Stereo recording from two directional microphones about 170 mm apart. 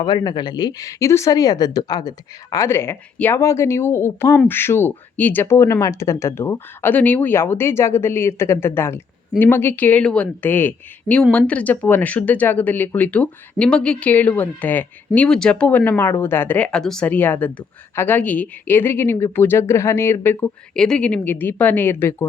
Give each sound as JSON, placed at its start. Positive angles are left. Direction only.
{"t": 0.0, "sound": "speech", "side_deg": 25}